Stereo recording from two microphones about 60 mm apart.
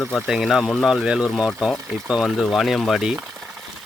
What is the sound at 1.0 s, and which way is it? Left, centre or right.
Speech, centre.